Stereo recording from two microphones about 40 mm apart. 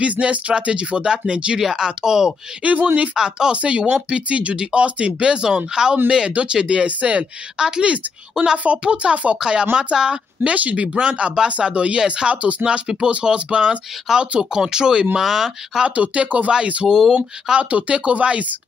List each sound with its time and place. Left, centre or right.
0.0 s speech: right
1.6 s speech: centre
2.6 s speech: right
3.2 s speech: centre
3.5 s speech: right
6.9 s speech: right
7.5 s speech: centre
7.8 s speech: right
9.4 s speech: right
12.6 s speech: right
15.9 s speech: right
16.8 s speech: centre
17.6 s speech: right